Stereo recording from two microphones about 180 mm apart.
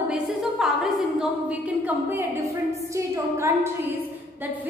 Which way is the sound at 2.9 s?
15° right (ahead or behind).